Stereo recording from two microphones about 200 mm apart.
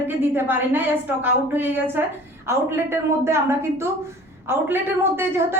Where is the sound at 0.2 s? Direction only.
10° right (ahead or behind).